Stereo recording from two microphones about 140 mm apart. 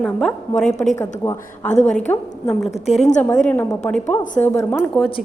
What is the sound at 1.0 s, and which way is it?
A woman's voice, 15° left (ahead or behind).